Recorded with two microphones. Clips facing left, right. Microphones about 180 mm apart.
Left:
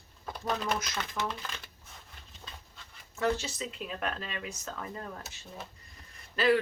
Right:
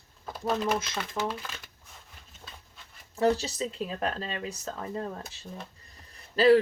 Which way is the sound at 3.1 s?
35° right (ahead or behind).